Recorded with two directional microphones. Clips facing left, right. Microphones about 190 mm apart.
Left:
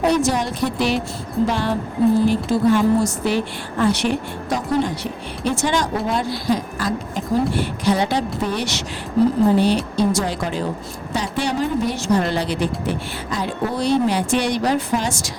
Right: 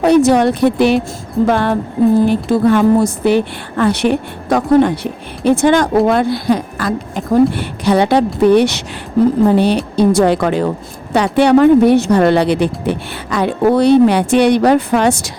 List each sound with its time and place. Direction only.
0.0 s speech: 60° right (ahead or behind)